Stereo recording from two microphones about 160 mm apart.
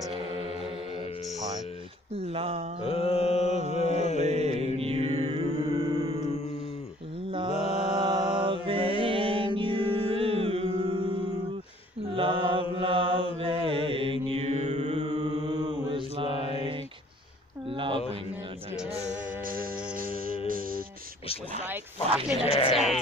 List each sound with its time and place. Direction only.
2.1 s speech: 40° right (ahead or behind)
2.8 s mantra: 35° left (ahead or behind)
4.2 s mantra: 40° right (ahead or behind)
5.8 s music: 35° right (ahead or behind)
7.2 s mantra: 30° right (ahead or behind)
9.6 s music: 35° right (ahead or behind)
12.1 s mantra: 30° right (ahead or behind)
15.1 s mantra: 25° right (ahead or behind)
17.6 s a sound: 35° right (ahead or behind)
18.9 s music: 55° right (ahead or behind)
22.5 s sheep: 35° left (ahead or behind)